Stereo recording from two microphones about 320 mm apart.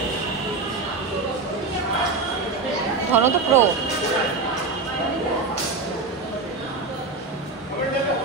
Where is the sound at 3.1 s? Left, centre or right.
Centre.